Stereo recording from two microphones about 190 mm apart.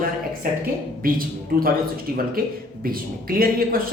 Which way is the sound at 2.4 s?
50° right (ahead or behind).